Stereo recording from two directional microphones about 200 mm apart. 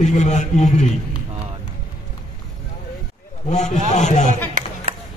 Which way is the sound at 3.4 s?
35° left (ahead or behind).